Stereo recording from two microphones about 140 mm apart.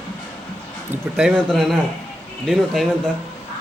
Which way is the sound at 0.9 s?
5° right (ahead or behind).